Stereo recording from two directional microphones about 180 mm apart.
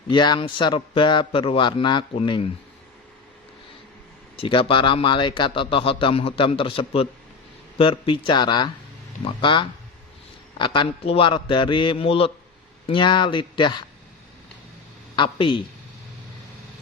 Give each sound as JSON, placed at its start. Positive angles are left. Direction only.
{"t": 0.1, "sound": "a man's voice", "side_deg": 25}
{"t": 4.4, "sound": "a man's voice", "side_deg": 30}
{"t": 15.1, "sound": "a woman's voice", "side_deg": 25}